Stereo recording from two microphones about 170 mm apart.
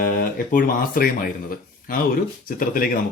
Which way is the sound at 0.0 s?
55° left (ahead or behind).